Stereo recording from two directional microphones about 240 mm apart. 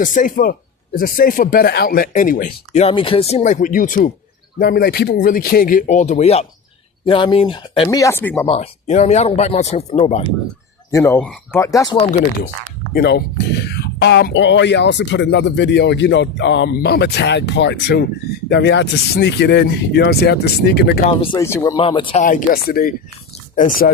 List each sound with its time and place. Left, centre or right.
0.0 s speech: left; by 8.4 s centre
8.4 s speech: left
10.9 s speech: centre
12.9 s speech: left
21.1 s speech: left
21.4 s speech: centre; by 23.9 s left